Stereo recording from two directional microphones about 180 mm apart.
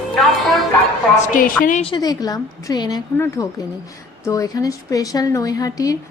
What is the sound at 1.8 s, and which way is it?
A woman's voice, 25° left (ahead or behind).